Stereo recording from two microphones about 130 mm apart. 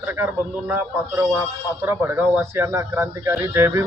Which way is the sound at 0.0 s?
15° right (ahead or behind).